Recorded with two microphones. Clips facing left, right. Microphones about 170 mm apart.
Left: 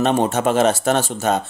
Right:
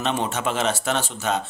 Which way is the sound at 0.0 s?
45° left (ahead or behind).